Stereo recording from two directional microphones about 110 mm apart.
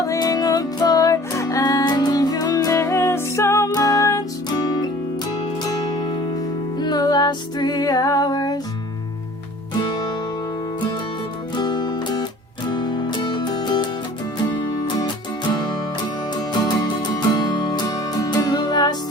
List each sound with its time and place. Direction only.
0.0 s music: 30° left (ahead or behind)
6.7 s music: 40° left (ahead or behind)
9.8 s music: 40° left (ahead or behind)
11.5 s music: 40° left (ahead or behind)
16.3 s music: 40° left (ahead or behind)